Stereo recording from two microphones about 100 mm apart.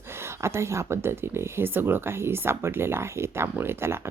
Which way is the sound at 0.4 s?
30° right (ahead or behind).